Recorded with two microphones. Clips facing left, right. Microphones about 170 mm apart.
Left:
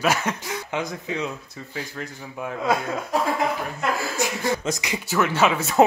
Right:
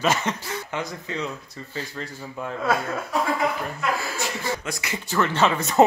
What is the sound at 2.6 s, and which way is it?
Speech, 15° left (ahead or behind).